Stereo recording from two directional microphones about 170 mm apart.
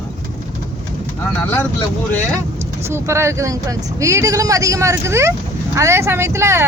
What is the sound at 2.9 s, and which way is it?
Speech, 15° right (ahead or behind).